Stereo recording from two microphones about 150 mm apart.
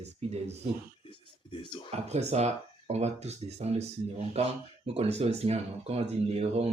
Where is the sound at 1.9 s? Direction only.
45° right (ahead or behind).